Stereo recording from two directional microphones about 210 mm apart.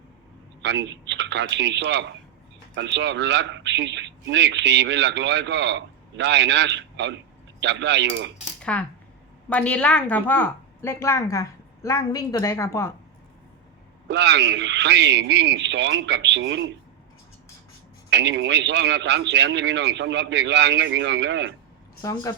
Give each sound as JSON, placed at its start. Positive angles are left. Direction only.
{"t": 0.6, "sound": "a man's voice", "side_deg": -55}
{"t": 8.6, "sound": "a woman's voice", "side_deg": 5}
{"t": 14.1, "sound": "a man's voice", "side_deg": -55}
{"t": 18.1, "sound": "a man's voice", "side_deg": -55}
{"t": 22.0, "sound": "a woman's voice", "side_deg": 15}